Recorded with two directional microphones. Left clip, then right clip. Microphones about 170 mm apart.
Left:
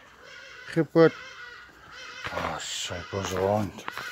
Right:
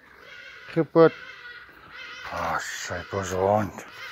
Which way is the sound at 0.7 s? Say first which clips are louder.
Right 2 dB; 15° left (ahead or behind).